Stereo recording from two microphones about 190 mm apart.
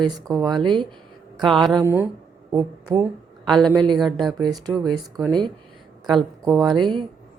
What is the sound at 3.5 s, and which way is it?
Speech, 5° left (ahead or behind).